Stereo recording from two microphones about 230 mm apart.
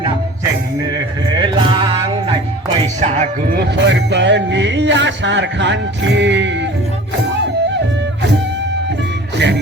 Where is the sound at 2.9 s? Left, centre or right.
Right.